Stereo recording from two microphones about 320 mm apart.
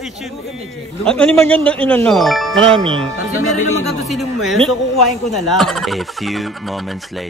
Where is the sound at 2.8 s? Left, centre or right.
Centre.